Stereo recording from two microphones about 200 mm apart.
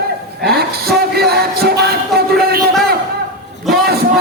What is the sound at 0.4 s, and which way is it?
Music, 50° right (ahead or behind).